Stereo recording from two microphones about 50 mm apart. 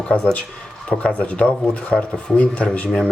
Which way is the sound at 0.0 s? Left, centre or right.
Left.